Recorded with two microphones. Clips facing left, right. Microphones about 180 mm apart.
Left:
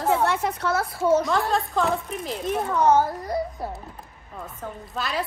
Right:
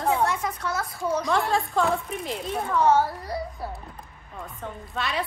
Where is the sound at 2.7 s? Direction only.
20° left (ahead or behind).